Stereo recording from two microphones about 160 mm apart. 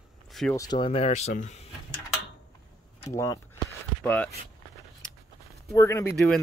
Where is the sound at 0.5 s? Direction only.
25° left (ahead or behind); by 1.7 s 50° left (ahead or behind).